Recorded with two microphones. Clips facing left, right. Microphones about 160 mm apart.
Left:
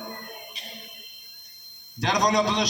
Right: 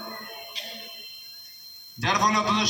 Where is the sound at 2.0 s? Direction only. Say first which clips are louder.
Left 3 dB; 40° left (ahead or behind).